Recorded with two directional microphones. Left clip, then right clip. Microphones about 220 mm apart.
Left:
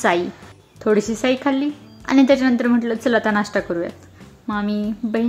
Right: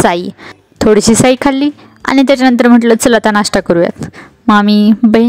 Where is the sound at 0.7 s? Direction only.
50° right (ahead or behind).